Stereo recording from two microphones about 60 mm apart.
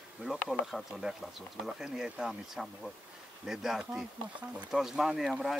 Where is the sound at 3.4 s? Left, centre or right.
Centre.